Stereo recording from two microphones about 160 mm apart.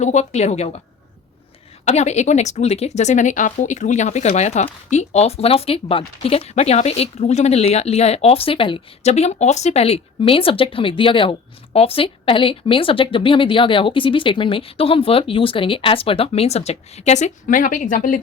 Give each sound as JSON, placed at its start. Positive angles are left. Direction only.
{"t": 0.0, "sound": "a woman's voice", "side_deg": 45}
{"t": 1.8, "sound": "speech", "side_deg": 45}